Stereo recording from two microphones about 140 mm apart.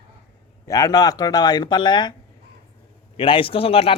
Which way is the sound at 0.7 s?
25° left (ahead or behind).